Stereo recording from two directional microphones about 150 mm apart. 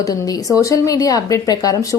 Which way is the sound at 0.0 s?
25° left (ahead or behind).